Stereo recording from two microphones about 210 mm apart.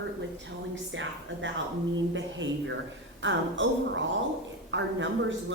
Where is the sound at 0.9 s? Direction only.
60° right (ahead or behind).